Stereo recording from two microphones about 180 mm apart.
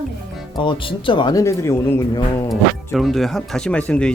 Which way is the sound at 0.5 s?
25° left (ahead or behind).